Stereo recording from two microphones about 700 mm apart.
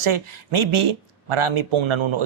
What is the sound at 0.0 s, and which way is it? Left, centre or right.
Speech, right.